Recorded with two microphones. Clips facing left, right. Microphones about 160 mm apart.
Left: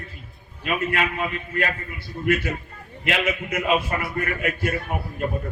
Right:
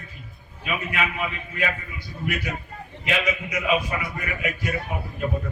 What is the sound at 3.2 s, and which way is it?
A man's voice, 50° left (ahead or behind).